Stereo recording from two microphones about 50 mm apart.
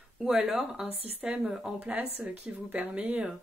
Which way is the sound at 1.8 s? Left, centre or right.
Right.